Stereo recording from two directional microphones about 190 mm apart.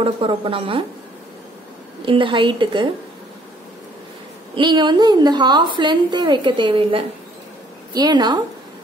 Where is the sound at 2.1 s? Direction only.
25° right (ahead or behind).